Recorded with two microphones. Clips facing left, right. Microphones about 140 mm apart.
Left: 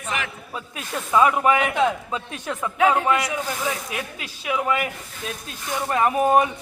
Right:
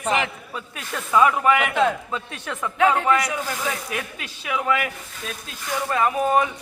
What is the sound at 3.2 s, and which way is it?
Speech, 25° left (ahead or behind).